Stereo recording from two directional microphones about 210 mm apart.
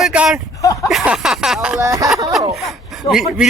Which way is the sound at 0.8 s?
5° right (ahead or behind).